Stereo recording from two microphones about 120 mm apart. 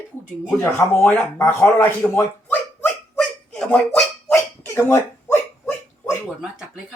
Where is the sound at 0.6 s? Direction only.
15° left (ahead or behind).